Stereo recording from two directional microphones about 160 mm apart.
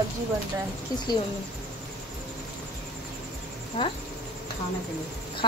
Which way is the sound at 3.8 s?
35° left (ahead or behind).